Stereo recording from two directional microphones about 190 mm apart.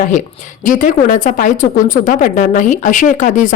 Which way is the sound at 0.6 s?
45° left (ahead or behind).